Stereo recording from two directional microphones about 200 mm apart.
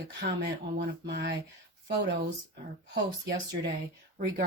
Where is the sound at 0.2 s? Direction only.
55° right (ahead or behind).